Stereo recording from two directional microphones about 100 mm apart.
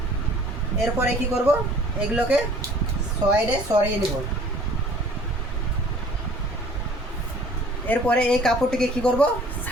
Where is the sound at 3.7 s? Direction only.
35° right (ahead or behind).